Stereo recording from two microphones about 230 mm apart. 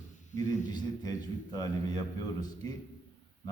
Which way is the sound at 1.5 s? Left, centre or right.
Centre.